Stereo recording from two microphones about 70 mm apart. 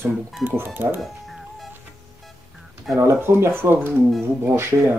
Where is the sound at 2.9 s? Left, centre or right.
Right.